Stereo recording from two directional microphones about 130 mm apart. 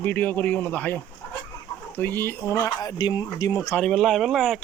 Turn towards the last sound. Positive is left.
turn(degrees=0)  # may be behind; listen again after turning